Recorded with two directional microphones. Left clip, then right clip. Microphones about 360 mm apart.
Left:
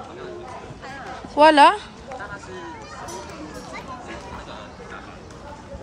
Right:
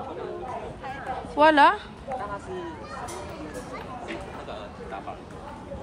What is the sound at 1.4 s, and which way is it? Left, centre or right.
Speech, centre.